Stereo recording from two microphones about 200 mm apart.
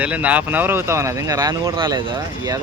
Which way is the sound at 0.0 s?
5° right (ahead or behind).